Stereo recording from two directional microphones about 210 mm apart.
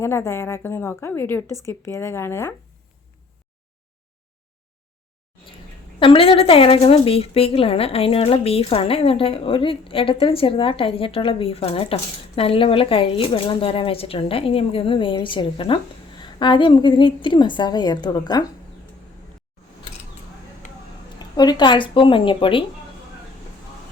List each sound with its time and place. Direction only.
0.0 s a woman's voice: 10° left (ahead or behind)
6.0 s speech: 25° left (ahead or behind)
21.2 s speech: 20° left (ahead or behind)